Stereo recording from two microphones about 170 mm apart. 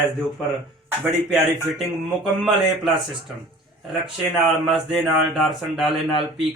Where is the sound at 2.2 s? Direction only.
Centre (ahead or behind).